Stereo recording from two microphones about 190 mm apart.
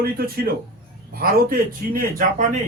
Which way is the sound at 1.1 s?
50° right (ahead or behind).